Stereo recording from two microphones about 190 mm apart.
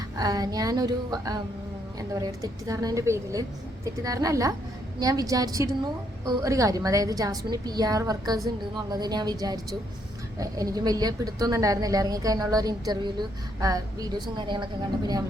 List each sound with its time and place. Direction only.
0.2 s a woman's voice: 20° right (ahead or behind)